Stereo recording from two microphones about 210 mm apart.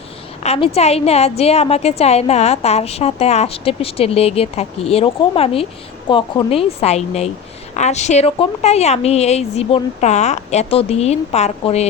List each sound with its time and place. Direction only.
0.4 s a woman's voice: 30° left (ahead or behind)